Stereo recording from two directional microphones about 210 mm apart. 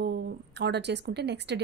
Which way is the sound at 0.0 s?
50° right (ahead or behind).